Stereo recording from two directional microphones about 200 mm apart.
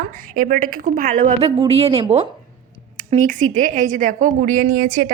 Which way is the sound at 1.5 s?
30° right (ahead or behind).